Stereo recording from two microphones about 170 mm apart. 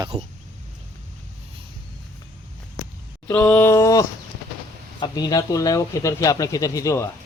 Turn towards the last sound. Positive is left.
turn(degrees=20)  # may be behind; listen again after turning